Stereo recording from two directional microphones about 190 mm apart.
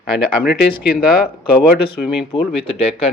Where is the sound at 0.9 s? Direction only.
50° left (ahead or behind).